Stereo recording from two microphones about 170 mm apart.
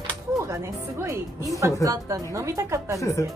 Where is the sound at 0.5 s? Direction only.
15° right (ahead or behind).